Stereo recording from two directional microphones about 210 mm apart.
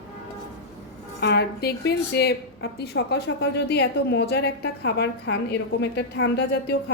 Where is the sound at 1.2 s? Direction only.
50° left (ahead or behind).